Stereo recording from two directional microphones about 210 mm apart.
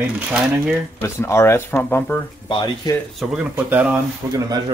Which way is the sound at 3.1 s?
5° right (ahead or behind).